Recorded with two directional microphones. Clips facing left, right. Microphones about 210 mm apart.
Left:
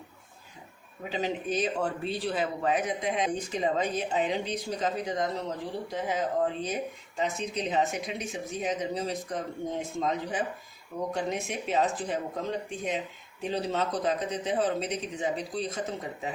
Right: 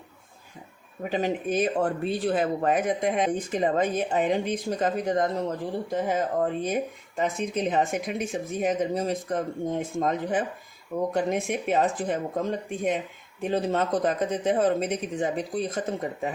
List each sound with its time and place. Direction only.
1.1 s speech: 50° right (ahead or behind)